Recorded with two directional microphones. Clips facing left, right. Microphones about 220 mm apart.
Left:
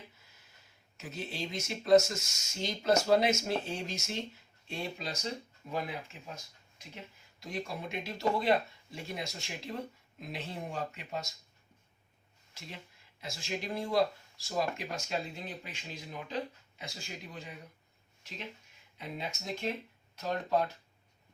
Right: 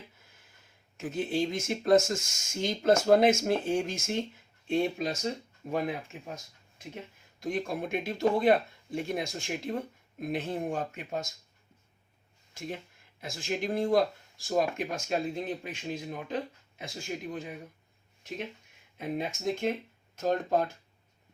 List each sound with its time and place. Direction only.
0.9 s speech: 50° right (ahead or behind)
6.7 s speech: 50° right (ahead or behind)
12.5 s speech: 50° right (ahead or behind)
18.9 s speech: 50° right (ahead or behind)